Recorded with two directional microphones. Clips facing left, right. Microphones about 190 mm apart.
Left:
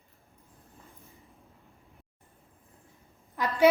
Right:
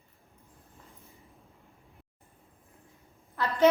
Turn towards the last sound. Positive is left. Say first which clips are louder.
# even
turn(degrees=15)  # may be behind; listen again after turning